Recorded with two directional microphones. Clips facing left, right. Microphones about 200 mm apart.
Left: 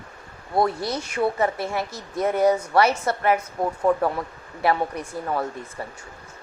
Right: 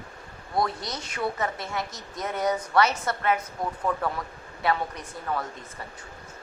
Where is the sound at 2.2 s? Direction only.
30° left (ahead or behind).